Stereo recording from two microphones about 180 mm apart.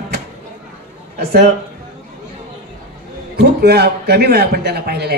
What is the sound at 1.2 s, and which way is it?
Speech, 60° right (ahead or behind).